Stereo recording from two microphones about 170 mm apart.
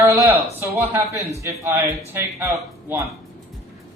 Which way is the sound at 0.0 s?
10° right (ahead or behind).